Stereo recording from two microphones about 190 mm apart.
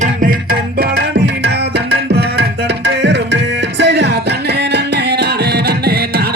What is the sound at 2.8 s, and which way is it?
Music, 65° right (ahead or behind).